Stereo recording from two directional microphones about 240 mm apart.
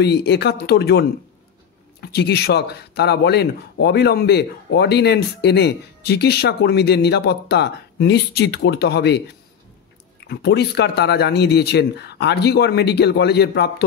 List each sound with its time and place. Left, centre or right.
0.0 s speech: left
10.2 s speech: left